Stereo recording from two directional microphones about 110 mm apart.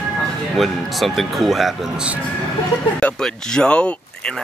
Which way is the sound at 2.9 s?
5° left (ahead or behind).